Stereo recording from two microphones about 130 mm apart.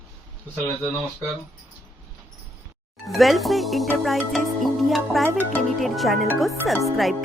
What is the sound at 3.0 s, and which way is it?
Speech, centre (ahead or behind).